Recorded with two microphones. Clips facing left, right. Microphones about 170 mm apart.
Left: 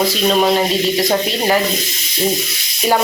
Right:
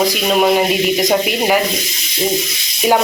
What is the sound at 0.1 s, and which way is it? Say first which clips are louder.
Speech: right 1 dB; 10° right (ahead or behind).